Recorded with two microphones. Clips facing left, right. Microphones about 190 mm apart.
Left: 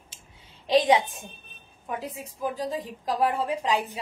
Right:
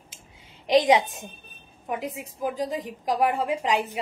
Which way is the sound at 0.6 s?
20° right (ahead or behind).